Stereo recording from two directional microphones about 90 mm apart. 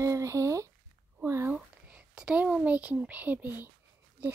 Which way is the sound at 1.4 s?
10° right (ahead or behind).